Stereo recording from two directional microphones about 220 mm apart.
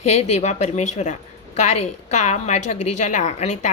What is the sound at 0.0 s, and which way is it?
Speech, 30° left (ahead or behind).